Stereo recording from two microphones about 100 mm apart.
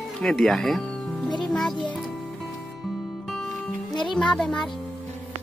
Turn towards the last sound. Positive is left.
turn(degrees=5)  # may be behind; listen again after turning